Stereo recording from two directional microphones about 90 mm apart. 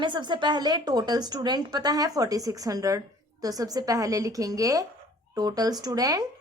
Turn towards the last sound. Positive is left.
turn(degrees=-45)  # may be behind; listen again after turning